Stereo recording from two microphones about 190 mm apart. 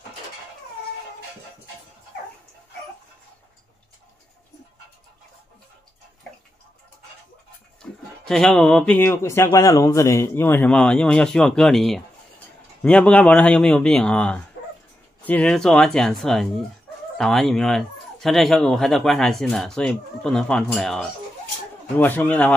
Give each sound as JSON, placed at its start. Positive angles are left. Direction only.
{"t": 7.8, "sound": "speech", "side_deg": 5}